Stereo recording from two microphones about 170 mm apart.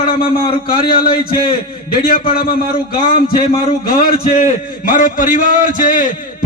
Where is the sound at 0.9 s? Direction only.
60° left (ahead or behind).